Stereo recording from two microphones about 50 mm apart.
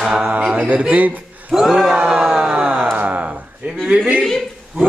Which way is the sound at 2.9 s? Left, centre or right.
Right.